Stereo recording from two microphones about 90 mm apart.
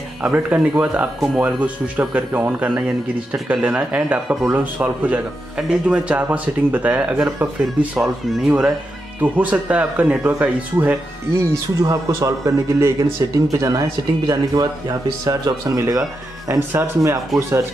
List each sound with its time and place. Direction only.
0.2 s speech: 15° right (ahead or behind)
11.9 s a man's voice: 35° right (ahead or behind)
16.4 s a man's voice: 25° right (ahead or behind)